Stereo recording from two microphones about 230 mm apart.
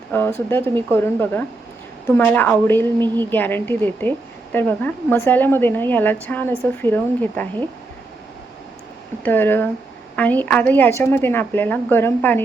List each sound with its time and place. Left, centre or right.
0.1 s a woman's voice: centre
9.2 s a woman's voice: centre